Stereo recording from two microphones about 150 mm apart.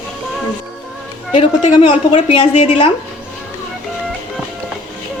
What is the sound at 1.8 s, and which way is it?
Speech, 35° left (ahead or behind).